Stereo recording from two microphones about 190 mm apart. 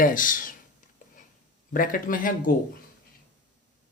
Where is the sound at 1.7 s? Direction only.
45° left (ahead or behind).